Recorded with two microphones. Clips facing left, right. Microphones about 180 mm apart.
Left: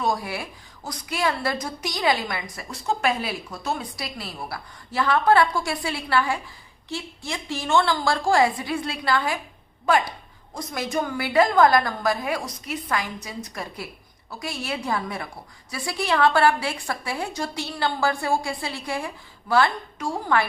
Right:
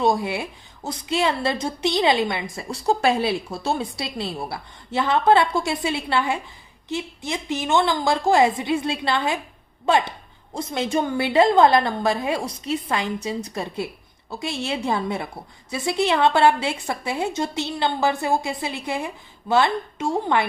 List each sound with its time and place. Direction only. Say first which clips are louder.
0.0 s a woman's voice: right 5 dB; 25° right (ahead or behind)